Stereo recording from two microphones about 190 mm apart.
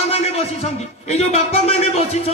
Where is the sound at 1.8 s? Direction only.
30° left (ahead or behind).